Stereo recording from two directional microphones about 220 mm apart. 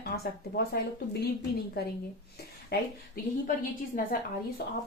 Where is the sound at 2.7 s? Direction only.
45° left (ahead or behind).